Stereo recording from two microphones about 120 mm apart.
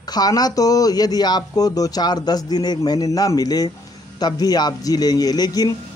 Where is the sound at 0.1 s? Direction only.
30° left (ahead or behind).